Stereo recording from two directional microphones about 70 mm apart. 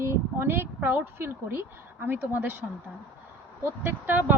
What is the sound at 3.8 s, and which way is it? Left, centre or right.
Speech, right.